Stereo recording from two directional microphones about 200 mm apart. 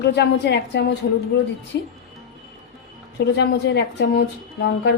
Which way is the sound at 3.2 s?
60° left (ahead or behind).